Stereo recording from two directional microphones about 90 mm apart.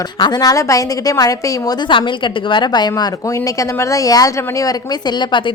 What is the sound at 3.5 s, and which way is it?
A woman's voice, 35° left (ahead or behind).